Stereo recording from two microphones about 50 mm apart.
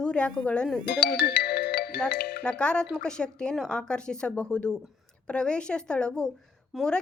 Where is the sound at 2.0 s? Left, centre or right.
Left.